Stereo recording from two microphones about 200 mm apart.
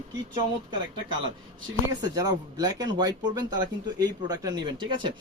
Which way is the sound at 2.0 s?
20° right (ahead or behind).